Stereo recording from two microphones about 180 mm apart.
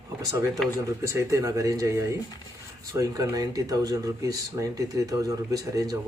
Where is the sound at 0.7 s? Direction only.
15° right (ahead or behind).